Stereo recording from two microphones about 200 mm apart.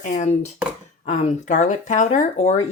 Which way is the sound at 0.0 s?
35° left (ahead or behind).